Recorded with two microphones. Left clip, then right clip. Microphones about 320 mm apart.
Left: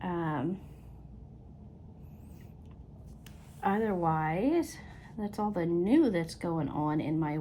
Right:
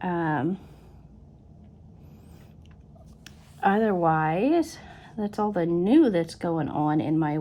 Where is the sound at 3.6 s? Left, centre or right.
Right.